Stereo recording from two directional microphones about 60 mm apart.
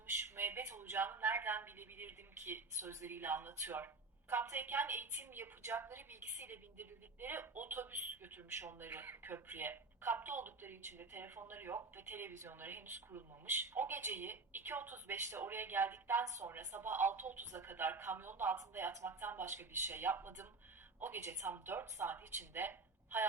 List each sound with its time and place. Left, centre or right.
0.3 s a woman's voice: right
2.8 s speech: right
3.1 s a woman's voice: right
18.5 s a woman's voice: right
22.1 s a woman's voice: right